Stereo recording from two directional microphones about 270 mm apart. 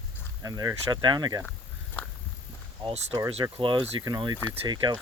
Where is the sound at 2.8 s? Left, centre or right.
Centre.